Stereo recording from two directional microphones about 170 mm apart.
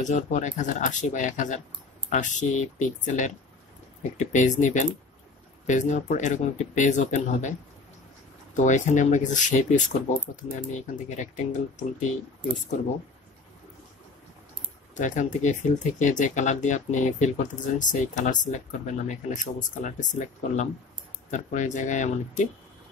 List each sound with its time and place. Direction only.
0.0 s speech: 45° left (ahead or behind)
8.5 s speech: 45° left (ahead or behind)
15.0 s speech: 45° left (ahead or behind)